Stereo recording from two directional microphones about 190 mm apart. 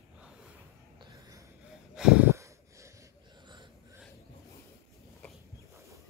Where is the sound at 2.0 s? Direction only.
5° right (ahead or behind).